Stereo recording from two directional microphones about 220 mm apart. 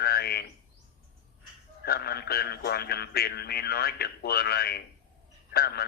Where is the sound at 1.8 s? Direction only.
45° left (ahead or behind).